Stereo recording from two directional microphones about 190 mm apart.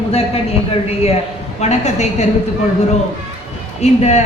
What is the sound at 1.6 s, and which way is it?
Speech, 35° left (ahead or behind).